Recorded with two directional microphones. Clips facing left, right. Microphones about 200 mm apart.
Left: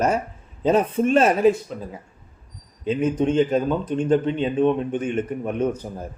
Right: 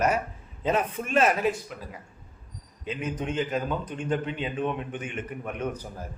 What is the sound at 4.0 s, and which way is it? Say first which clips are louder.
Speech: left 10 dB; 45° left (ahead or behind).